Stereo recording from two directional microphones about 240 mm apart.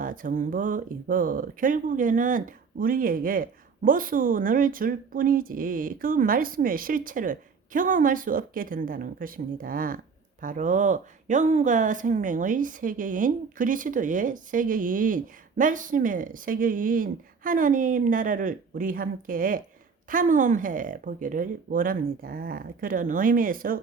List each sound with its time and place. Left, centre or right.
0.0 s speech: right